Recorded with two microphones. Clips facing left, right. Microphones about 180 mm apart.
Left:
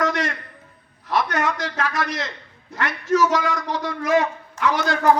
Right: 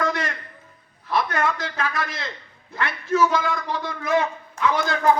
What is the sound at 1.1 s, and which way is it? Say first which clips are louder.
A man's voice: left 1 dB; 80° left.